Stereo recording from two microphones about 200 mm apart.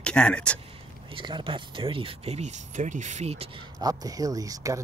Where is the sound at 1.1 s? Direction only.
25° right (ahead or behind).